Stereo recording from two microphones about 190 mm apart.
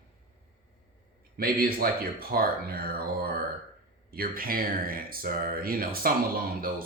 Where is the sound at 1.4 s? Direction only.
50° right (ahead or behind).